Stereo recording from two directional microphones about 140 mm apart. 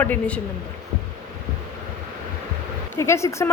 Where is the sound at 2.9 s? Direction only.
20° left (ahead or behind).